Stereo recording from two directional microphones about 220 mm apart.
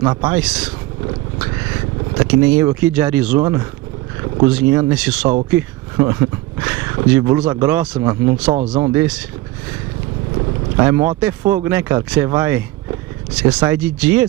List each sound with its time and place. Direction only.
0.0 s speech: 15° right (ahead or behind)
0.4 s speech: 5° right (ahead or behind)
2.1 s speech: 10° right (ahead or behind)
8.0 s speech: 20° right (ahead or behind)
10.8 s speech: 10° right (ahead or behind)